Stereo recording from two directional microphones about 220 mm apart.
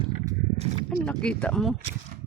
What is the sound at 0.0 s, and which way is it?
Horse, 25° right (ahead or behind).